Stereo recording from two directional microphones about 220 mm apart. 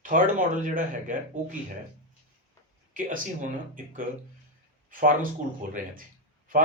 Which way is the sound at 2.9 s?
35° right (ahead or behind).